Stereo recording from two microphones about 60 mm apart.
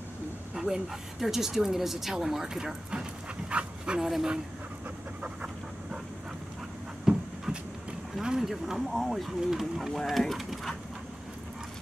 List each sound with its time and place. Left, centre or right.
0.6 s a sound: centre
1.2 s speech: centre
5.2 s dog: centre
7.1 s a sound: centre
7.5 s vehicle: centre
8.2 s speech: centre